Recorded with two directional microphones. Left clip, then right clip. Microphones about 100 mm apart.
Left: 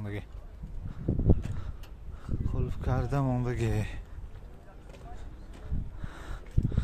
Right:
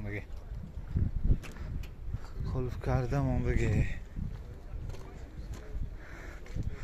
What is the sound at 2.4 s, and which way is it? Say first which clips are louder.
Speech: right 1 dB; 30° left (ahead or behind).